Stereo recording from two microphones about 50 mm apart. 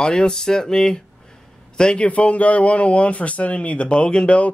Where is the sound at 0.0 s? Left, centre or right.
Centre.